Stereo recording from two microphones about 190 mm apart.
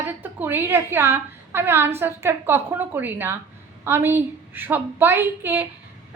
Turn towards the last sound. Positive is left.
turn(degrees=-10)  # may be behind; listen again after turning